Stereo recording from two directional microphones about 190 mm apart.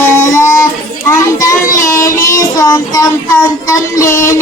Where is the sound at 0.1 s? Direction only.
15° left (ahead or behind).